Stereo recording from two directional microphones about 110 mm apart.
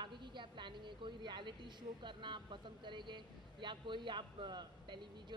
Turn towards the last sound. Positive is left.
turn(degrees=-45)  # may be behind; listen again after turning